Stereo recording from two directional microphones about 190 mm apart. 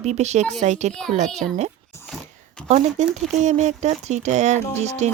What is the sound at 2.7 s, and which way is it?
Speech, 35° right (ahead or behind).